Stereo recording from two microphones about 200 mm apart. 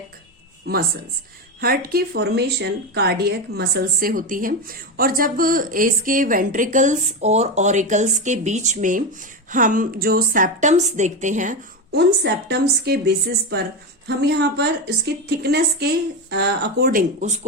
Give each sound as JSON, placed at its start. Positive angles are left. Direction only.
{"t": 0.7, "sound": "a woman's voice", "side_deg": -50}
{"t": 11.9, "sound": "a woman's voice", "side_deg": -55}